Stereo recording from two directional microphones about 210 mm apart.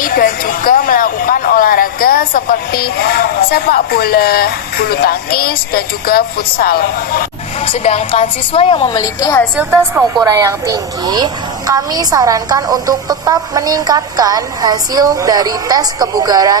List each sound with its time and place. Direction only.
0.0 s speech: 40° left (ahead or behind)
7.6 s a woman's voice: 30° left (ahead or behind)
9.6 s a woman's voice: 5° right (ahead or behind)
10.2 s a woman's voice: 15° right (ahead or behind)